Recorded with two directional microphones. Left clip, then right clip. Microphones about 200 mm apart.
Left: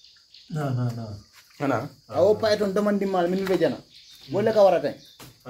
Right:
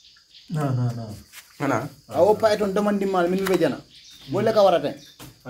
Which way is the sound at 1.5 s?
20° left (ahead or behind).